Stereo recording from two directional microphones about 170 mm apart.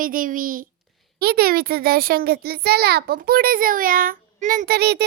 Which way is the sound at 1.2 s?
65° right (ahead or behind).